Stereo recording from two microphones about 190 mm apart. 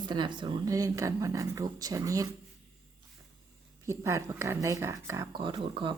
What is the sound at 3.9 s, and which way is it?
Speech, 15° right (ahead or behind).